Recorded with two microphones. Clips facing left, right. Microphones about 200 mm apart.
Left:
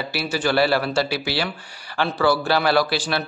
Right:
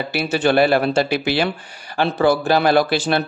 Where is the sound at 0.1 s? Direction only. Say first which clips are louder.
Right 5 dB; 20° right (ahead or behind).